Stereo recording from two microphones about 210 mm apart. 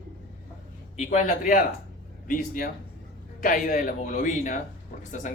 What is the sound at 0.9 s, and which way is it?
Speech, 35° left (ahead or behind).